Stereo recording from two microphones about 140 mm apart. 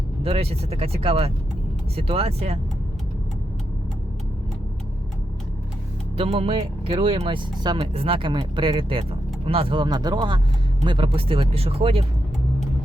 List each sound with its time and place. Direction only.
0.2 s speech: 45° right (ahead or behind)
6.1 s speech: 45° right (ahead or behind)